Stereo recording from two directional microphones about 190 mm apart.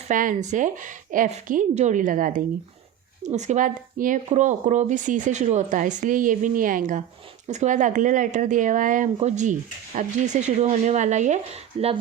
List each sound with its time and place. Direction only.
0.1 s a woman's voice: 45° right (ahead or behind)